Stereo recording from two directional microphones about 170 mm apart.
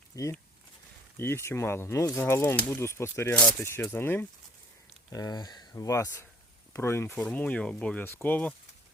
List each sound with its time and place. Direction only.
0.1 s speech: 20° left (ahead or behind)